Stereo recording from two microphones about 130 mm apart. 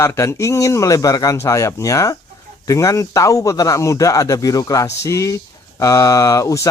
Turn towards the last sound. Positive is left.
turn(degrees=25)  # may be behind; listen again after turning